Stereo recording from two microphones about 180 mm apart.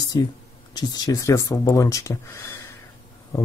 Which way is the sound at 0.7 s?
20° left (ahead or behind).